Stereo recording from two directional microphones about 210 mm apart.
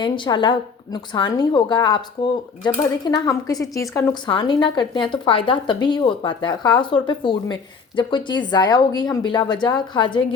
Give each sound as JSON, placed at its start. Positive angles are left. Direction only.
{"t": 0.0, "sound": "a woman's voice", "side_deg": 20}